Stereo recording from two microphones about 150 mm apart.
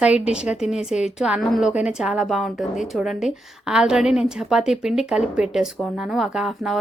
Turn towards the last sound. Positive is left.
turn(degrees=0)  # may be behind; listen again after turning